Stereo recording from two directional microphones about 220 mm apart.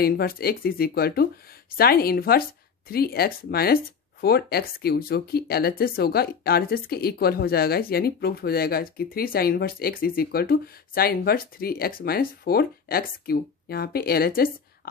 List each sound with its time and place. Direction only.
0.0 s speech: 45° left (ahead or behind)